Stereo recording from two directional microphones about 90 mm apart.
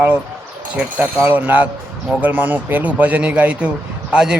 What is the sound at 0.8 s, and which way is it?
Speech, 20° right (ahead or behind).